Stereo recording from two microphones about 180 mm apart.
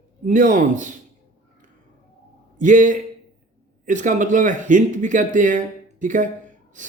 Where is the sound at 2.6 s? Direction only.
45° right (ahead or behind).